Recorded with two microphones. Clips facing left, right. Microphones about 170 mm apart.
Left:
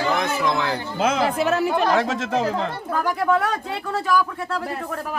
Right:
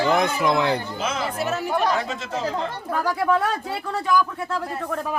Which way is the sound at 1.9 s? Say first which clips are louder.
Left 5 dB; 90° left.